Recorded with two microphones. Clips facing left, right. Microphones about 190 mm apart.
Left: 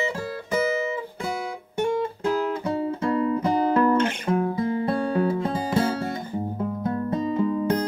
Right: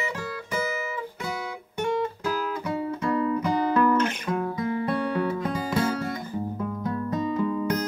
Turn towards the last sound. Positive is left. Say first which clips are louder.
# left 3 dB
turn(degrees=30)  # may be behind; listen again after turning